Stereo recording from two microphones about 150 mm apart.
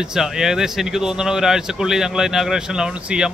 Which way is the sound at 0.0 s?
5° right (ahead or behind).